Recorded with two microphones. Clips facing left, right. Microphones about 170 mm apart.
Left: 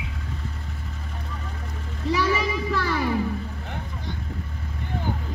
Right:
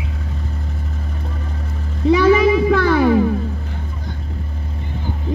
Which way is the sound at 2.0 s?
60° right (ahead or behind).